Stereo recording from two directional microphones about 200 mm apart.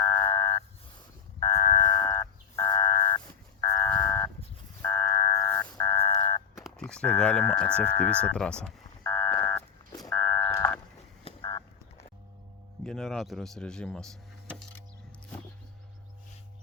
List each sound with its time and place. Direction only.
0.0 s frog: 15° left (ahead or behind)
1.4 s buzzer: 20° left (ahead or behind)
4.8 s a sound: 10° left (ahead or behind)
6.0 s car alarm: 20° left (ahead or behind)
6.6 s a sound: centre (ahead or behind)
11.3 s fowl: 25° left (ahead or behind)
12.8 s speech: centre (ahead or behind)